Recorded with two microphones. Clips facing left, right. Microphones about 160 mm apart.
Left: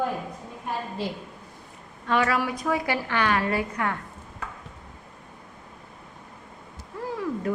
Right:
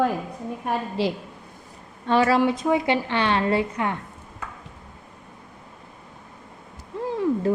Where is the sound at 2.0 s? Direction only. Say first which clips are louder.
Right 5 dB; 30° right (ahead or behind).